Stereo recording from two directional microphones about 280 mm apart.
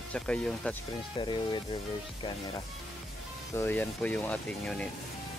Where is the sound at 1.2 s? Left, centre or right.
Centre.